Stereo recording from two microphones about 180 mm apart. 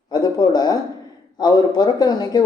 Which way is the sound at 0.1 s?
20° left (ahead or behind).